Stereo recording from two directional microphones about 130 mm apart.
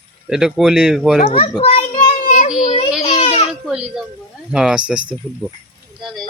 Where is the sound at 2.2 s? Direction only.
75° left (ahead or behind).